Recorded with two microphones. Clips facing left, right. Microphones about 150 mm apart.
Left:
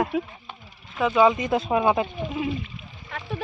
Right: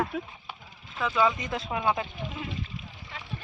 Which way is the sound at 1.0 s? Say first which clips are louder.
Left 7 dB; 25° left (ahead or behind).